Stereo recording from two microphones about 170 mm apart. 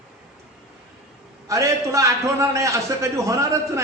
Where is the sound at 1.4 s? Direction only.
20° right (ahead or behind).